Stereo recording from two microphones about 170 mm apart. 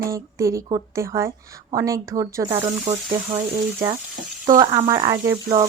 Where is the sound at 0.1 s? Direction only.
20° right (ahead or behind).